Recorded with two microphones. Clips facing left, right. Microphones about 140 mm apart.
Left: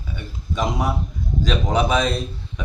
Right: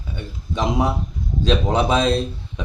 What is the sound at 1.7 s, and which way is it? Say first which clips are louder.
Speech: even; 25° right (ahead or behind).